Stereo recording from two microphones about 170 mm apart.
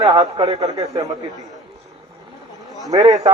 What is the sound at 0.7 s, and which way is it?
Speech, 20° right (ahead or behind).